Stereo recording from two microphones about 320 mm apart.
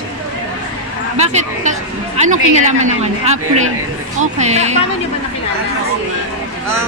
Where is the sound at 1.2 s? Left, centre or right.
Right.